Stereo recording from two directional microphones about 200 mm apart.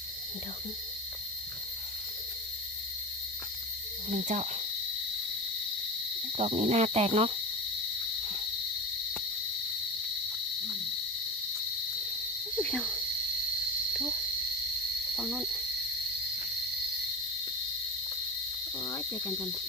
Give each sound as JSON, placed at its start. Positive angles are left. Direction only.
{"t": 4.1, "sound": "speech", "side_deg": -40}
{"t": 6.3, "sound": "speech", "side_deg": -30}
{"t": 12.5, "sound": "cricket", "side_deg": 5}
{"t": 13.9, "sound": "frog", "side_deg": -5}
{"t": 15.1, "sound": "a sound", "side_deg": 0}
{"t": 18.9, "sound": "cricket", "side_deg": 20}